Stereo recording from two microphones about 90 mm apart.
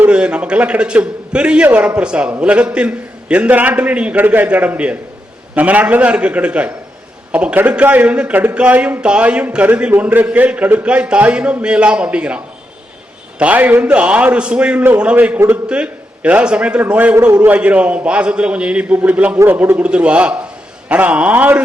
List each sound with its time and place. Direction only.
0.0 s a man's voice: 15° right (ahead or behind)
13.4 s a man's voice: 15° right (ahead or behind)